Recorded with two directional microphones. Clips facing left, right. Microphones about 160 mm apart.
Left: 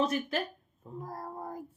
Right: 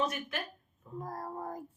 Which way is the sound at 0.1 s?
30° left (ahead or behind).